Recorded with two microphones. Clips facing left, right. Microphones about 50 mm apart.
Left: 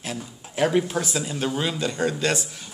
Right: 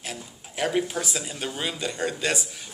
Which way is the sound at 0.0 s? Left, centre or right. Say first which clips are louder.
Left 4 dB; centre.